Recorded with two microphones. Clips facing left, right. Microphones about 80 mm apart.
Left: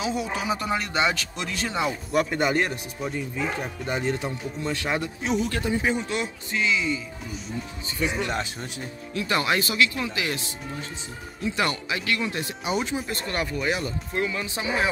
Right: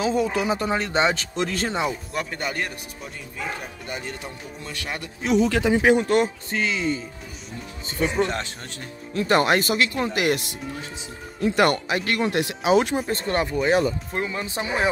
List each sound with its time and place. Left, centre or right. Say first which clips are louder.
0.0 s speech: right 5 dB; right
0.6 s speech: right 3 dB; right
2.1 s speech: left 6 dB; centre
4.1 s speech: left 7 dB; left
5.3 s speech: right 7 dB; right
6.0 s speech: right 9 dB; right
8.3 s speech: even; centre
9.1 s speech: right 5 dB; right
11.4 s speech: right 7 dB; right
12.9 s speech: right 5 dB; right